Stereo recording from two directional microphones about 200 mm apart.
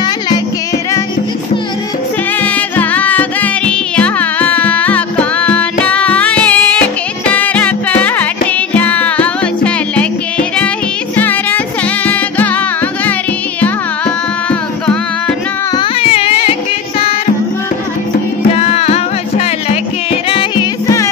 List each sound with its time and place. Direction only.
2.4 s music: 10° left (ahead or behind)
11.1 s music: 10° left (ahead or behind)
13.6 s music: 5° left (ahead or behind)
15.7 s music: 25° left (ahead or behind)
18.6 s music: 30° left (ahead or behind)